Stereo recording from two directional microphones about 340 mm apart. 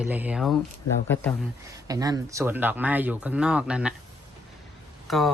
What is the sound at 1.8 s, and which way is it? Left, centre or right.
Speech, centre.